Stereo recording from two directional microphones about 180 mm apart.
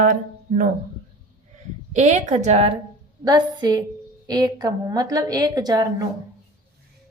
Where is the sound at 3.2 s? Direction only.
25° right (ahead or behind).